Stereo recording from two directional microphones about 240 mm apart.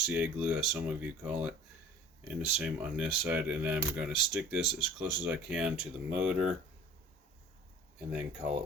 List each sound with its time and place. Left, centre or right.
0.0 s speech: centre
7.9 s speech: centre
8.4 s speech: right